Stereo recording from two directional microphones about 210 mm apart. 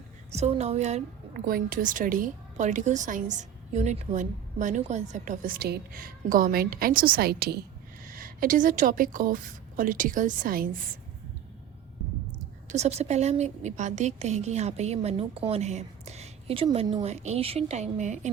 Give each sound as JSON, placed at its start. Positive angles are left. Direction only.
{"t": 0.3, "sound": "a woman's voice", "side_deg": -30}
{"t": 12.6, "sound": "a woman's voice", "side_deg": -30}